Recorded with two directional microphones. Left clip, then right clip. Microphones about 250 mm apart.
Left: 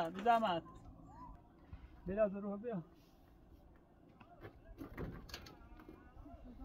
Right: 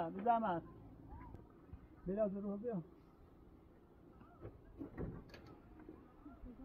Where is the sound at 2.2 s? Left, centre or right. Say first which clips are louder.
Left 4 dB; left.